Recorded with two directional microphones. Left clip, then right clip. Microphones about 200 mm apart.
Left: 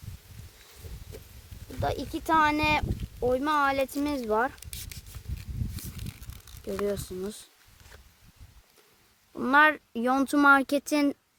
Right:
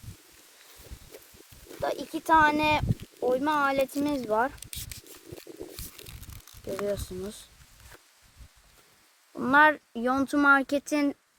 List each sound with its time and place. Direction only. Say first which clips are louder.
1.1 s a sound: left 2 dB; 15° right (ahead or behind)
1.8 s speech: even; 15° left (ahead or behind)
6.8 s speech: left 1 dB; 20° left (ahead or behind)
9.3 s speech: right 1 dB; 15° left (ahead or behind); by 11.2 s 35° left (ahead or behind)